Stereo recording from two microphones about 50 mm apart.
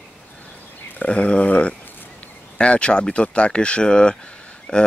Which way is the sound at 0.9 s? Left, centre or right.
Left.